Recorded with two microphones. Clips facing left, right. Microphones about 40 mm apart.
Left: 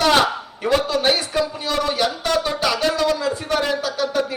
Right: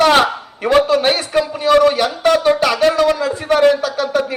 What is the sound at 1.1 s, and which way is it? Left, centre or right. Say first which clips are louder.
A man's voice: right 4 dB; right.